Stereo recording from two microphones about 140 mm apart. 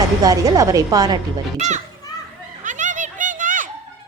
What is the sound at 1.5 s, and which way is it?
Speech, 55° right (ahead or behind).